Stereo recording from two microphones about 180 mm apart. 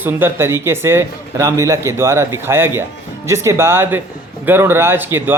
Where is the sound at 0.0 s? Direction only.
10° right (ahead or behind).